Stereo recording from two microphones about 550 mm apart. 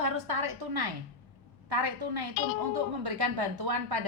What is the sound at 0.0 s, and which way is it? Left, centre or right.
A woman's voice, right.